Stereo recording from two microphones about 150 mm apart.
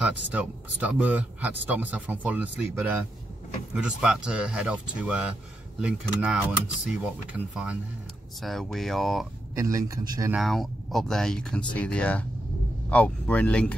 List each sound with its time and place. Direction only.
0.0 s speech: 10° right (ahead or behind)
9.6 s a man's voice: 20° right (ahead or behind)
10.3 s speech: centre (ahead or behind)